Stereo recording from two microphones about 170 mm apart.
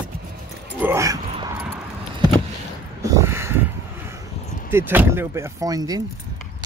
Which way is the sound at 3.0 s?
20° right (ahead or behind).